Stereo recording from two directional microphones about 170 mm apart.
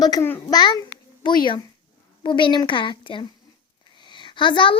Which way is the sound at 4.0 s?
25° left (ahead or behind).